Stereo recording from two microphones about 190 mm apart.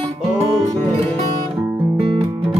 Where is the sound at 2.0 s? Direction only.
30° right (ahead or behind).